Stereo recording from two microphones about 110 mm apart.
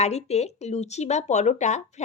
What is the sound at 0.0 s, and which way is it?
Speech, 80° left.